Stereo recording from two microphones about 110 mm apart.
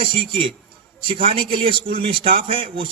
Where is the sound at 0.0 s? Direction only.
50° right (ahead or behind).